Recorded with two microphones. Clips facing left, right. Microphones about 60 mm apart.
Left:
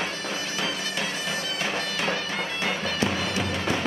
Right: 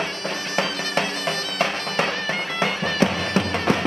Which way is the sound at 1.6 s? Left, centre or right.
Right.